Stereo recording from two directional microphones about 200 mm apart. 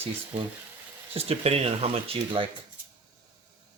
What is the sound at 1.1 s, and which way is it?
Speech, 30° right (ahead or behind).